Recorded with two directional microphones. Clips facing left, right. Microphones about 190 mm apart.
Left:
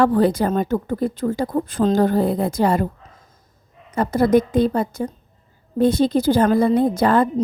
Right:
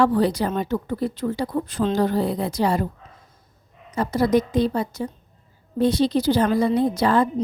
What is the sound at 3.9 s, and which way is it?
A woman's voice, 55° left (ahead or behind).